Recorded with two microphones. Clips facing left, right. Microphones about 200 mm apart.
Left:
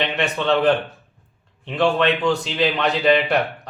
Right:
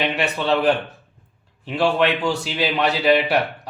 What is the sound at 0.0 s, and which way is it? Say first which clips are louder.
A man's voice: even; 5° right (ahead or behind).